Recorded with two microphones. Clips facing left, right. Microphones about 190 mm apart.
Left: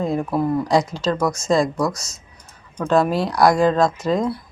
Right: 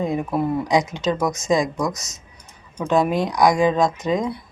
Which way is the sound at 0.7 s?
20° right (ahead or behind).